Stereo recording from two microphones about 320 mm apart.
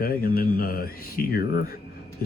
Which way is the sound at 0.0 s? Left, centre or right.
Left.